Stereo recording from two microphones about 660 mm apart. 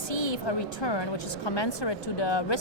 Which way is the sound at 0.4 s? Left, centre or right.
Left.